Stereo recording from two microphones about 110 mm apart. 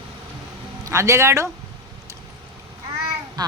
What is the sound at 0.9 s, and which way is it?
Speech, 25° right (ahead or behind).